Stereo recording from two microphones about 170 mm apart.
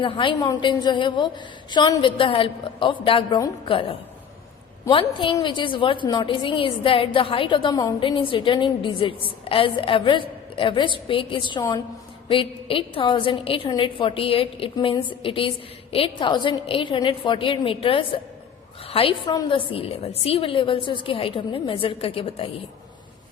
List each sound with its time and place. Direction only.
0.0 s a woman's voice: 30° left (ahead or behind)